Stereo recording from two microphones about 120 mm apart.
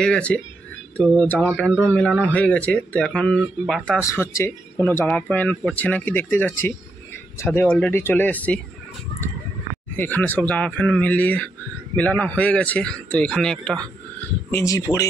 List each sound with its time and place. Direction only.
0.0 s speech: 10° left (ahead or behind)
4.0 s speech: 25° left (ahead or behind)
9.9 s speech: 15° left (ahead or behind)
14.5 s speech: 25° left (ahead or behind)